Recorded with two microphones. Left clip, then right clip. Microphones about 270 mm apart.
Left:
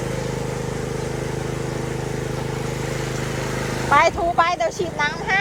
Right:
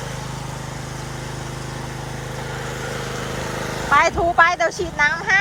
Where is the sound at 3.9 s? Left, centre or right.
Centre.